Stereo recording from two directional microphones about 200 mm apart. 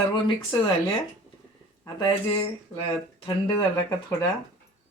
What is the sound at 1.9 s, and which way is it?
Speech, 25° left (ahead or behind).